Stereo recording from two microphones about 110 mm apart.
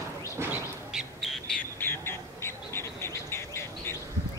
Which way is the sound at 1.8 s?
20° left (ahead or behind).